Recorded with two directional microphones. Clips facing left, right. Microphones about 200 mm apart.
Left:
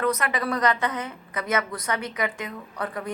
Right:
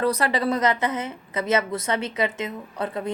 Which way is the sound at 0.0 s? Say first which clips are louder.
Right 3 dB; 30° right (ahead or behind).